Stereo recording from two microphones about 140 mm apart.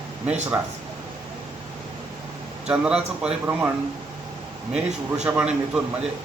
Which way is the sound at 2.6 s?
5° right (ahead or behind).